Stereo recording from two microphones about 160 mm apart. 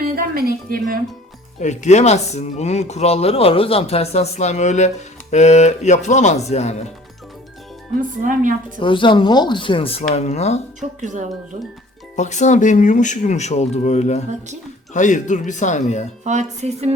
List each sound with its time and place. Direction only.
0.0 s a sound: 70° right (ahead or behind)
1.6 s speech: 45° left (ahead or behind)
8.2 s a woman's voice: 55° right (ahead or behind)
8.8 s speech: 30° left (ahead or behind)
10.8 s music: 50° right (ahead or behind)
12.1 s speech: 45° left (ahead or behind)
16.2 s music: 45° right (ahead or behind)